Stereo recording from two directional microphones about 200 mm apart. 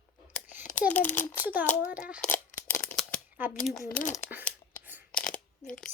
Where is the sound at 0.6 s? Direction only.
40° left (ahead or behind).